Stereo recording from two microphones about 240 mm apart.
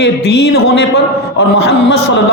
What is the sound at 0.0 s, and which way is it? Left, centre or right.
A man's voice, left.